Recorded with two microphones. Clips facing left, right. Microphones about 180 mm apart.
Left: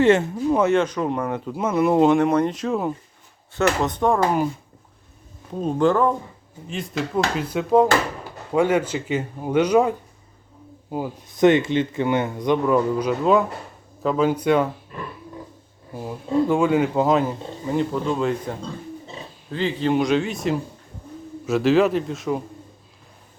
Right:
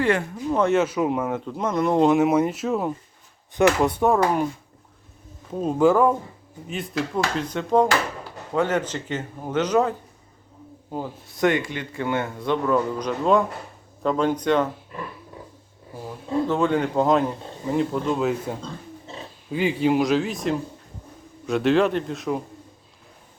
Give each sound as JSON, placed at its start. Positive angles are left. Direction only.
{"t": 0.0, "sound": "speech", "side_deg": 25}
{"t": 0.5, "sound": "speech", "side_deg": 0}
{"t": 1.5, "sound": "speech", "side_deg": 5}
{"t": 5.5, "sound": "speech", "side_deg": -5}
{"t": 10.9, "sound": "speech", "side_deg": 15}
{"t": 16.0, "sound": "speech", "side_deg": 15}